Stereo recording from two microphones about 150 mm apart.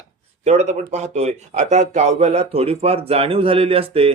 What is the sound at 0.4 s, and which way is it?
Speech, 45° right (ahead or behind).